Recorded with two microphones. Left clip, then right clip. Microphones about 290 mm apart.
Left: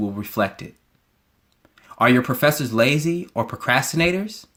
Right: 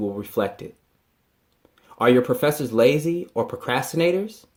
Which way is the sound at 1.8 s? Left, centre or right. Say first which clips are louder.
Even; left.